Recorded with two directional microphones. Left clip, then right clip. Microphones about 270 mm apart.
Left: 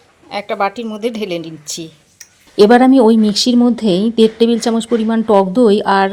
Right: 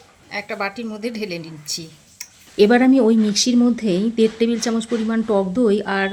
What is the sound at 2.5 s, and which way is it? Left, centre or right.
Speech, centre.